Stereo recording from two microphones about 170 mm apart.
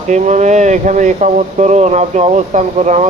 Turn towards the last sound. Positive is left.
turn(degrees=-45)  # may be behind; listen again after turning